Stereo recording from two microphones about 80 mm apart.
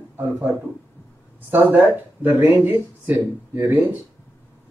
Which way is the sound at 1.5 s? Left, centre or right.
Right.